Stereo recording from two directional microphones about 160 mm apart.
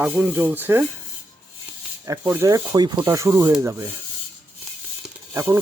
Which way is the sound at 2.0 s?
20° right (ahead or behind).